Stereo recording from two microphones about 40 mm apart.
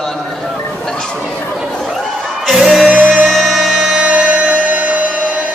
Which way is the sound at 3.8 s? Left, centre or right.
Right.